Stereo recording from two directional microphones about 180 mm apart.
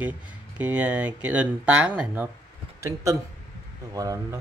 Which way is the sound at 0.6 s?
10° right (ahead or behind).